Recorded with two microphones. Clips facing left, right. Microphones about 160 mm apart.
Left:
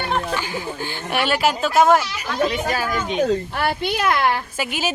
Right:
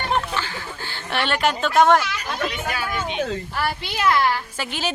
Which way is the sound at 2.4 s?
35° left (ahead or behind).